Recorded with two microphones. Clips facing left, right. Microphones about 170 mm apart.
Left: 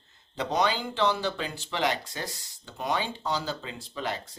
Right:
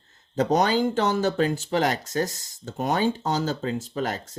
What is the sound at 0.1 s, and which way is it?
Speech, 45° right (ahead or behind).